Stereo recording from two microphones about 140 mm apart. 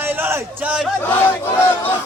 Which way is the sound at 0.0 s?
15° right (ahead or behind).